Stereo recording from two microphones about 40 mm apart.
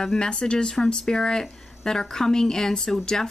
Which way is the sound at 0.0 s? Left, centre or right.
Centre.